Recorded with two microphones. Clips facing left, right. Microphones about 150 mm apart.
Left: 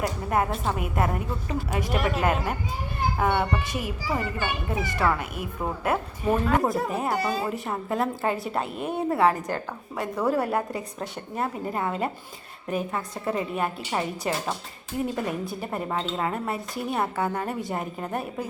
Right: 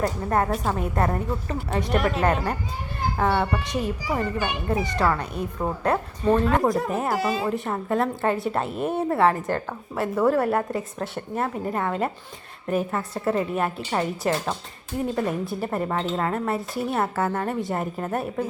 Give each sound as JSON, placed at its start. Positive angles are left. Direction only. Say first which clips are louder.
{"t": 0.0, "sound": "a woman's voice", "louder": "right 2 dB", "side_deg": 10}
{"t": 4.0, "sound": "a child's voice", "louder": "right 2 dB", "side_deg": -15}
{"t": 5.8, "sound": "a woman's voice", "louder": "right 3 dB", "side_deg": 5}